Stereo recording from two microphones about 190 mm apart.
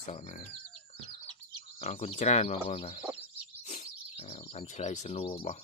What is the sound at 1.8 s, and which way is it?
Speech, 35° left (ahead or behind).